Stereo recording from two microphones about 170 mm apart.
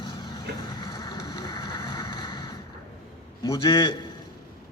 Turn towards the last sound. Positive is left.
turn(degrees=25)  # may be behind; listen again after turning